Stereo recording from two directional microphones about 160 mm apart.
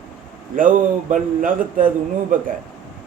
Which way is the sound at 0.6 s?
55° right (ahead or behind).